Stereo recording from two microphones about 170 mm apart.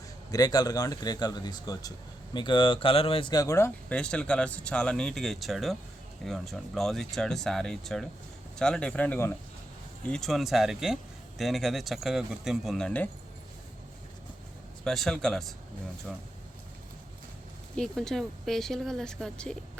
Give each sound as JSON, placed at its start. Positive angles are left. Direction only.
{"t": 0.3, "sound": "a man's voice", "side_deg": 20}
{"t": 14.8, "sound": "speech", "side_deg": 0}
{"t": 17.7, "sound": "speech", "side_deg": 0}